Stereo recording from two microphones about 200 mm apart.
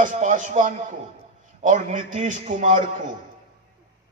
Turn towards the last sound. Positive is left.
turn(degrees=-40)  # may be behind; listen again after turning